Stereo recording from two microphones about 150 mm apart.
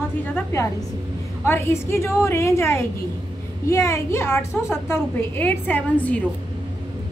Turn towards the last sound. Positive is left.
turn(degrees=10)  # may be behind; listen again after turning